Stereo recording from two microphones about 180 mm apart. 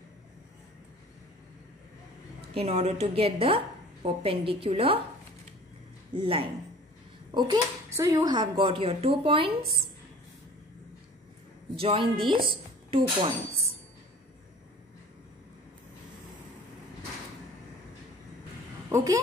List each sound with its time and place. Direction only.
2.5 s a woman's voice: 35° right (ahead or behind)
11.7 s speech: 30° right (ahead or behind)